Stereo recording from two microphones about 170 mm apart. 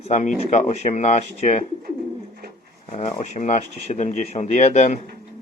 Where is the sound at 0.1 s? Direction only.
45° left (ahead or behind).